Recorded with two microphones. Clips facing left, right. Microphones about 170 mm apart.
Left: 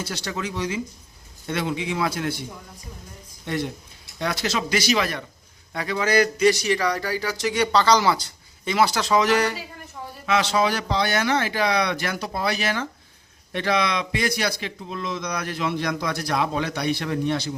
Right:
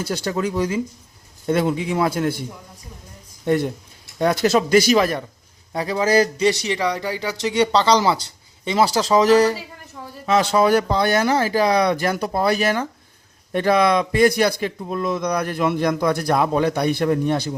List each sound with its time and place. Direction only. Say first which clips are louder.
0.0 s speech: right 7 dB; 45° right (ahead or behind)
3.4 s speech: right 8 dB; 50° right (ahead or behind)